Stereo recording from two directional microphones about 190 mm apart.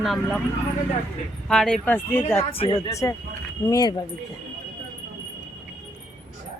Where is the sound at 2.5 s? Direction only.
30° left (ahead or behind).